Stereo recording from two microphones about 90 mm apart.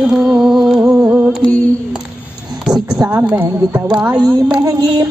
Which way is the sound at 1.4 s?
15° left (ahead or behind).